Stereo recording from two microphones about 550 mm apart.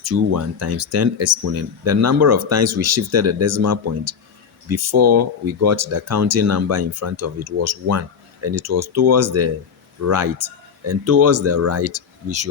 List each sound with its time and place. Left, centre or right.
0.0 s speech: right